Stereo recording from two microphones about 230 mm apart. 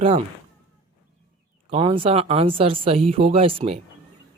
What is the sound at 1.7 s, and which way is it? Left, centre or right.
Speech, right.